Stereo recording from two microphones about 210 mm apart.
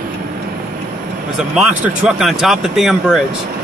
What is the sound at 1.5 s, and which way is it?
Speech, 5° right (ahead or behind).